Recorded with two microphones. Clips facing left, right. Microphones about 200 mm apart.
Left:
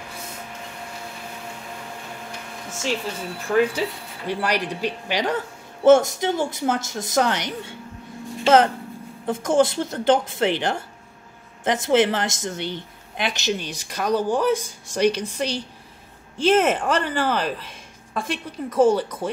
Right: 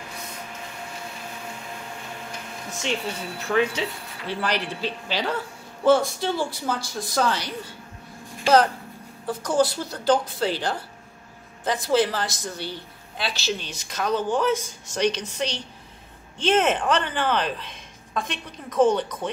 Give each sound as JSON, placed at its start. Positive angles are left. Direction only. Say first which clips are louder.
{"t": 3.4, "sound": "a woman's voice", "louder": "left 3 dB", "side_deg": 10}
{"t": 9.2, "sound": "a woman's voice", "louder": "left 3 dB", "side_deg": 25}